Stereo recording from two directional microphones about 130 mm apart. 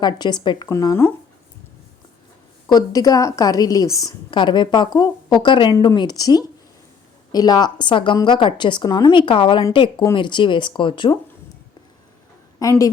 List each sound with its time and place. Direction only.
0.0 s a woman's voice: 35° left (ahead or behind)
2.6 s a woman's voice: 30° left (ahead or behind)
12.6 s a woman's voice: 25° left (ahead or behind)